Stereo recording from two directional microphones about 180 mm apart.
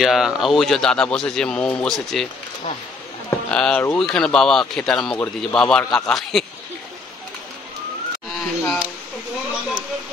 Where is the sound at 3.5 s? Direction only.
5° left (ahead or behind).